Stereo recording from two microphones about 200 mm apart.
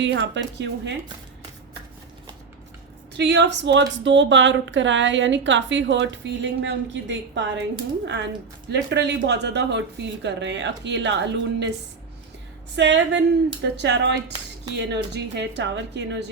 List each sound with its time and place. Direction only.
0.0 s a woman's voice: 65° right (ahead or behind)
3.1 s a woman's voice: 60° right (ahead or behind)
12.7 s a woman's voice: 60° right (ahead or behind)